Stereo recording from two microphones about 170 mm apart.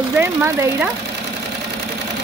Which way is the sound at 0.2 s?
15° right (ahead or behind).